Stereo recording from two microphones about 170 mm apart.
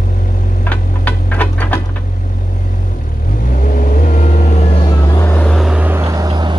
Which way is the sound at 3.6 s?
55° left (ahead or behind).